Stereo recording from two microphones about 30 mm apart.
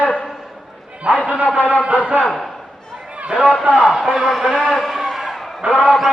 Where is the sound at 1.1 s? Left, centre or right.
Right.